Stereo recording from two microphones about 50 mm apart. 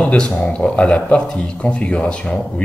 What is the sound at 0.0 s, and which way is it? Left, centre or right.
Speech, left.